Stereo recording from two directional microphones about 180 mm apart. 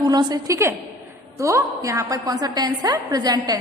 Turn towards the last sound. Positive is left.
turn(degrees=-20)  # may be behind; listen again after turning